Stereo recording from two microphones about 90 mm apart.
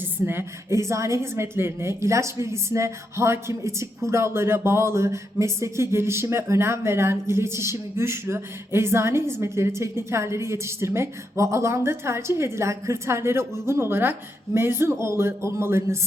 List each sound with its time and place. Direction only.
0.0 s a woman's voice: 25° right (ahead or behind)